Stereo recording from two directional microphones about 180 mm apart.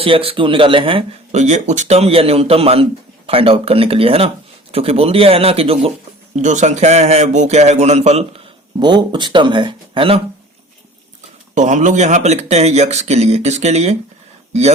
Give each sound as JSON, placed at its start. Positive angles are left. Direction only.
{"t": 0.0, "sound": "speech", "side_deg": -30}
{"t": 8.8, "sound": "speech", "side_deg": -25}
{"t": 11.5, "sound": "speech", "side_deg": -45}